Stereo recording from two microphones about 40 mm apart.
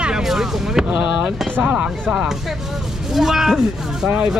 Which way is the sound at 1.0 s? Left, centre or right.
Right.